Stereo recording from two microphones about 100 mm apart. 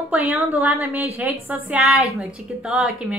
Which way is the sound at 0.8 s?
20° right (ahead or behind).